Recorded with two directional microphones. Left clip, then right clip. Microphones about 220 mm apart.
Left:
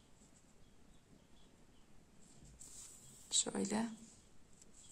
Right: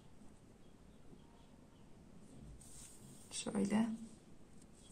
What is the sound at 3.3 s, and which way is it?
Speech, 25° left (ahead or behind).